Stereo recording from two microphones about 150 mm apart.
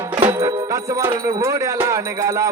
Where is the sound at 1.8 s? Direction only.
20° right (ahead or behind).